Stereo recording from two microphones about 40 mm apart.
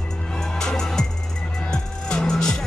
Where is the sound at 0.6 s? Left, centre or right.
Centre.